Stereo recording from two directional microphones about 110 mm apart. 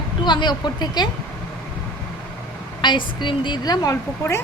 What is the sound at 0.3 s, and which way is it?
Speech, 45° left (ahead or behind).